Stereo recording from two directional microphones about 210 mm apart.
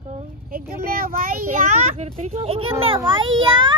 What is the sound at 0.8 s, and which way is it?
A child's voice, 45° right (ahead or behind).